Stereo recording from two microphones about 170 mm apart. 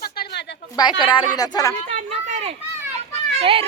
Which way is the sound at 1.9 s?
45° right (ahead or behind).